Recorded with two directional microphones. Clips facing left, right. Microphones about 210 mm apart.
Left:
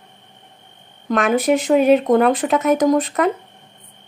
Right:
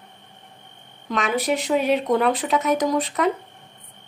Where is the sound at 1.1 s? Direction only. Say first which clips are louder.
Left 6 dB; 50° left (ahead or behind).